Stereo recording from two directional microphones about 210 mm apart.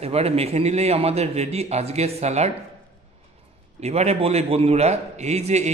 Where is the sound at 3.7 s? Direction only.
30° right (ahead or behind).